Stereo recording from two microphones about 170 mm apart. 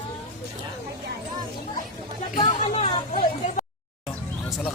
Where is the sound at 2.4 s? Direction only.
35° left (ahead or behind).